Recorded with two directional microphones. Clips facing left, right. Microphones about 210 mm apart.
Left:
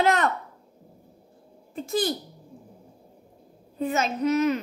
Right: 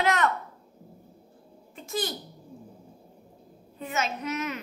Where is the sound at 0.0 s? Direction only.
35° left (ahead or behind).